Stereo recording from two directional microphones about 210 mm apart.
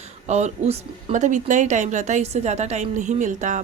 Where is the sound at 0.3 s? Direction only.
30° right (ahead or behind).